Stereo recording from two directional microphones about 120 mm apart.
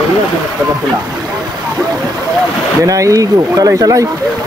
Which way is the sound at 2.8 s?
25° right (ahead or behind).